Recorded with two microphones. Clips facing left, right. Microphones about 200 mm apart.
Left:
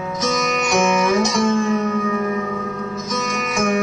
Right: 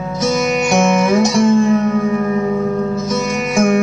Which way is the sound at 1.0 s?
30° right (ahead or behind).